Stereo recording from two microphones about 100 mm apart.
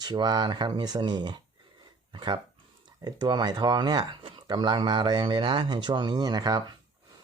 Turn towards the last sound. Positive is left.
turn(degrees=-40)  # may be behind; listen again after turning